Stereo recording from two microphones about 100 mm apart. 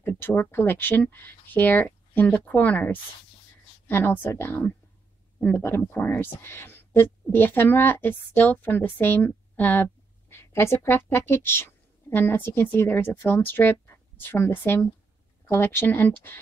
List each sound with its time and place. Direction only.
0.0 s a woman's voice: 20° left (ahead or behind)